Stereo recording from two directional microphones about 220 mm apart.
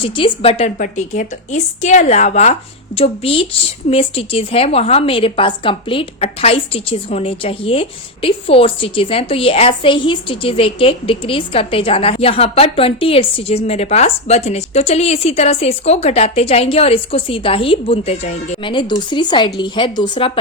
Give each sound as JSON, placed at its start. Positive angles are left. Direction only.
{"t": 0.0, "sound": "a woman's voice", "side_deg": 25}